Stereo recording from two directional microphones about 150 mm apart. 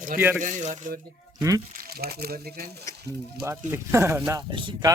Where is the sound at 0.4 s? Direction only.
60° right (ahead or behind).